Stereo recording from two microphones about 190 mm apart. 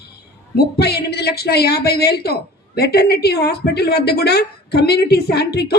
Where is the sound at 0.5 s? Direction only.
55° left (ahead or behind).